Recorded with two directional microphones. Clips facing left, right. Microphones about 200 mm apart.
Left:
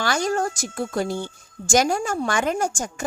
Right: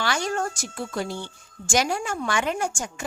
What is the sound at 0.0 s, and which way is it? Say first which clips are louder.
A woman's voice: left 3 dB; 40° left (ahead or behind).